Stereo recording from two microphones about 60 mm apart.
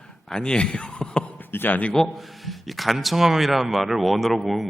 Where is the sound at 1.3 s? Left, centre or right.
Left.